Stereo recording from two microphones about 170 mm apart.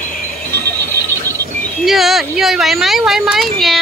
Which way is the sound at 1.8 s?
Centre (ahead or behind).